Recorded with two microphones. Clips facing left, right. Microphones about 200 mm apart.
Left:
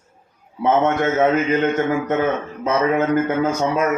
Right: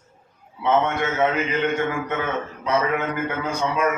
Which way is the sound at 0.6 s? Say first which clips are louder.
Left 4 dB; 45° left (ahead or behind).